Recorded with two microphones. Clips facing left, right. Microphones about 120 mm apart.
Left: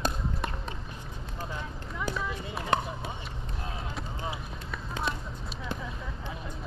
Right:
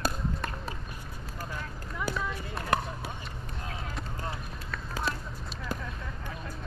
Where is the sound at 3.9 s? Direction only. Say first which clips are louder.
Left 1 dB; 5° left (ahead or behind).